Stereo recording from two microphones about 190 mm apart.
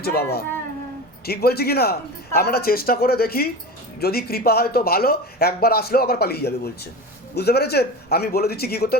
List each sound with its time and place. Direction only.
0.0 s speech: 55° left (ahead or behind)